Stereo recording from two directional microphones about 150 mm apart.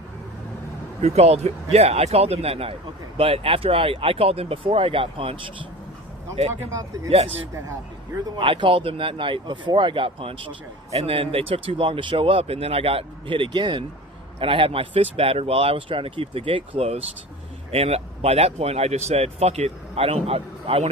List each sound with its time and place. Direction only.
1.0 s speech: 45° right (ahead or behind)
6.5 s speech: 20° right (ahead or behind)
8.4 s speech: 35° right (ahead or behind)